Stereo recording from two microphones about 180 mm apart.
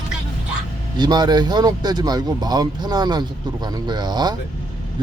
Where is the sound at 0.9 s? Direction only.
25° right (ahead or behind).